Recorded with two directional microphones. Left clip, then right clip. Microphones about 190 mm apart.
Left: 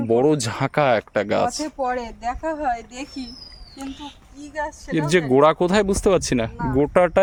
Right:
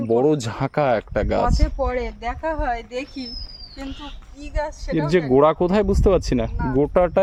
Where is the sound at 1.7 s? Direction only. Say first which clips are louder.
Even; 35° right (ahead or behind).